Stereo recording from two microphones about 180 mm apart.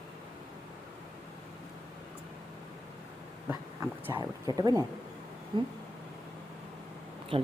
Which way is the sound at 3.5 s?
15° right (ahead or behind).